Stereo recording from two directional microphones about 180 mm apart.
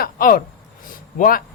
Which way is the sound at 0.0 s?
50° left (ahead or behind).